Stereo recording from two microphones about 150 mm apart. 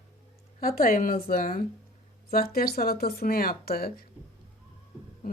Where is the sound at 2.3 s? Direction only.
90° left.